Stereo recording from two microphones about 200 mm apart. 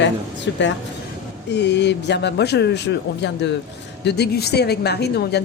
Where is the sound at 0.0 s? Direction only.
65° left (ahead or behind).